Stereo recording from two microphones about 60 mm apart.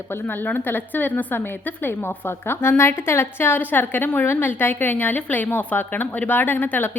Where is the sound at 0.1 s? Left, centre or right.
Left.